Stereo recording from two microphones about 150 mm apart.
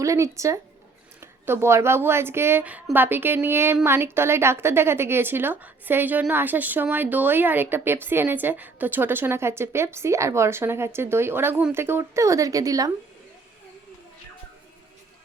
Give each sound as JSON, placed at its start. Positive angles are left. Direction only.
{"t": 0.0, "sound": "a woman's voice", "side_deg": -20}